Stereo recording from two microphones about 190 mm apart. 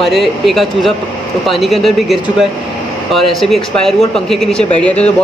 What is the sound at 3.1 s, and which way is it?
Speech, centre (ahead or behind).